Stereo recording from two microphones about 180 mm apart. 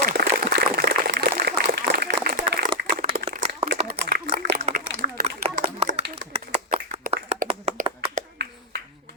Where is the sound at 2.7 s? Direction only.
30° right (ahead or behind).